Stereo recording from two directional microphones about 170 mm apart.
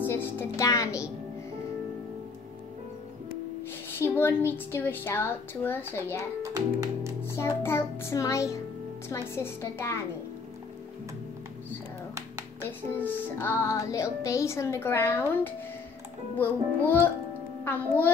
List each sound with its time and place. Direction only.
0.0 s music: 15° left (ahead or behind)
3.9 s music: 15° left (ahead or behind)
6.4 s speech: 20° right (ahead or behind)
7.2 s music: 15° left (ahead or behind)
12.6 s music: 15° left (ahead or behind)